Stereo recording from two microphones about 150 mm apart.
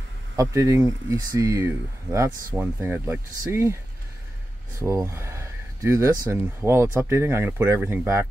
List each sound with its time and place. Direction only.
0.4 s speech: 20° right (ahead or behind)
4.7 s speech: 20° right (ahead or behind)